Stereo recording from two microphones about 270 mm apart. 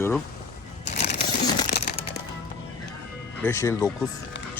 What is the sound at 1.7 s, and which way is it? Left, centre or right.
Music, left.